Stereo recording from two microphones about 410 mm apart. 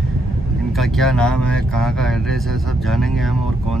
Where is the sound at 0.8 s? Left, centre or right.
Centre.